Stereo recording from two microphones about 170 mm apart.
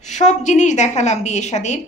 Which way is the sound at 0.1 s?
45° left (ahead or behind).